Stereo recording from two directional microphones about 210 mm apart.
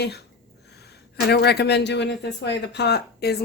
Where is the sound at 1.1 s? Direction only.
50° left (ahead or behind).